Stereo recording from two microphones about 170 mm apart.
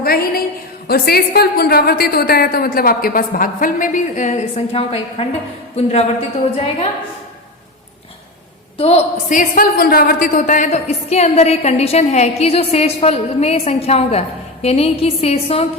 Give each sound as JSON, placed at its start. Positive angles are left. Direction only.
{"t": 0.0, "sound": "a sound", "side_deg": 65}
{"t": 0.9, "sound": "a woman's voice", "side_deg": 65}
{"t": 9.3, "sound": "a woman's voice", "side_deg": 55}